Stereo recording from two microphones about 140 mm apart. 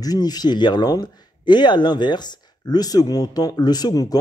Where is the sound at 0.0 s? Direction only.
30° left (ahead or behind).